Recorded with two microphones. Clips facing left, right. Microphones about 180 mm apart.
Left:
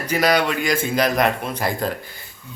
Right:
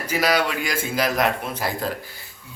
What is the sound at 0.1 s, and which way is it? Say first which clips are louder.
Speech: left 3 dB; 5° right (ahead or behind).